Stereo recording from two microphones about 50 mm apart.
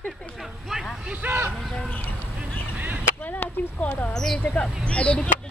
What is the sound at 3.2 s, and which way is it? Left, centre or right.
Speech, left.